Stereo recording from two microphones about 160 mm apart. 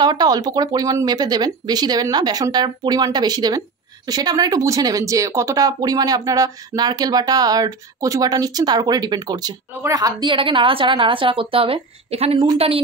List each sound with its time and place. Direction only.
0.0 s a woman's voice: 25° right (ahead or behind)